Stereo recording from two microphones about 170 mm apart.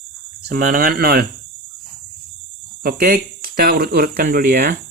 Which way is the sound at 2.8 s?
60° right (ahead or behind).